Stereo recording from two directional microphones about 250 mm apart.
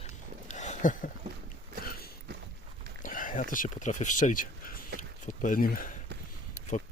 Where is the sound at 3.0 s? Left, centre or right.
Left.